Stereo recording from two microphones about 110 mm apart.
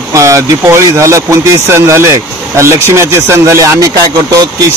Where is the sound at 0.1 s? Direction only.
25° right (ahead or behind).